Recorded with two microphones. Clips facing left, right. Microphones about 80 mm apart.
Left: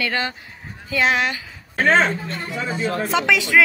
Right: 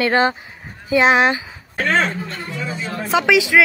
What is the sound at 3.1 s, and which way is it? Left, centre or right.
Speech, centre.